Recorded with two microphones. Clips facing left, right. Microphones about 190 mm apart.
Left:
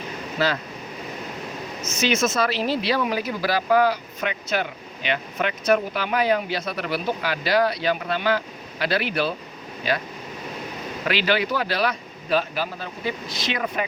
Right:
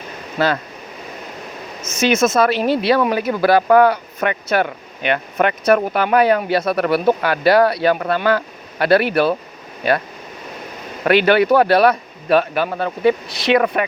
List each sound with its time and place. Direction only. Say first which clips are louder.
0.3 s speech: right 5 dB; 55° right (ahead or behind)
1.8 s speech: right 6 dB; 50° right (ahead or behind)
11.0 s speech: right 10 dB; 55° right (ahead or behind)